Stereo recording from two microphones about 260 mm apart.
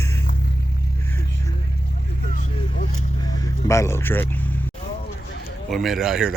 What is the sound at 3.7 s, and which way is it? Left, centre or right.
Speech, centre.